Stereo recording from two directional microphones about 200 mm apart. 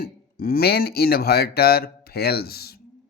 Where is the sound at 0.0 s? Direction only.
50° left (ahead or behind).